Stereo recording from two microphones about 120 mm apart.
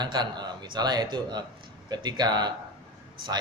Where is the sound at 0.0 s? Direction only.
35° right (ahead or behind).